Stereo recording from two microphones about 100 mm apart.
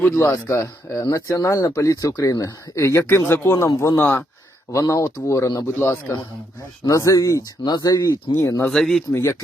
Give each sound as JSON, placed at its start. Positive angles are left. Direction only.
{"t": 0.0, "sound": "speech", "side_deg": 25}
{"t": 4.0, "sound": "speech", "side_deg": 15}
{"t": 4.7, "sound": "speech", "side_deg": 30}
{"t": 8.6, "sound": "speech", "side_deg": 5}